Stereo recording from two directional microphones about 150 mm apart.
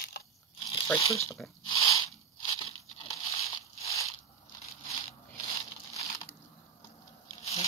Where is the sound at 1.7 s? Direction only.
25° left (ahead or behind).